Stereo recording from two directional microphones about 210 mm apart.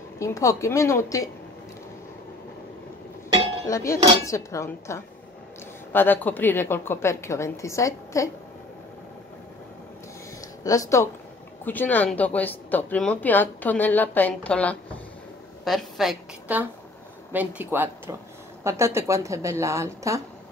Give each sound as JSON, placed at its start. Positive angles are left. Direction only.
{"t": 0.2, "sound": "speech", "side_deg": 15}
{"t": 3.6, "sound": "speech", "side_deg": 15}
{"t": 10.6, "sound": "a woman's voice", "side_deg": 15}